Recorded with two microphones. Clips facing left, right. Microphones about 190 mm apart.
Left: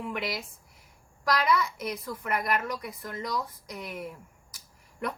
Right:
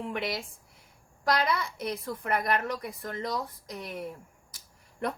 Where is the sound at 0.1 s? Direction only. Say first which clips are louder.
Right 1 dB; 25° right (ahead or behind).